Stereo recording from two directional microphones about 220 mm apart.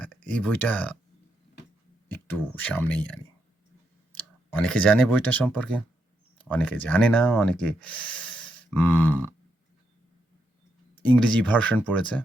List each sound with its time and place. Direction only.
0.0 s speech: 5° left (ahead or behind)
2.0 s speech: 10° left (ahead or behind)
4.2 s speech: 5° left (ahead or behind)
11.1 s speech: 5° left (ahead or behind)